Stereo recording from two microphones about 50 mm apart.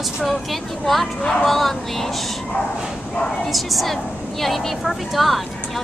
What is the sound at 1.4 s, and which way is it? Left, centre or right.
Speech, centre.